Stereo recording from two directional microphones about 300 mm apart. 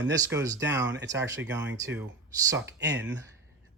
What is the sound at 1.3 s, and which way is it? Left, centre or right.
Speech, right.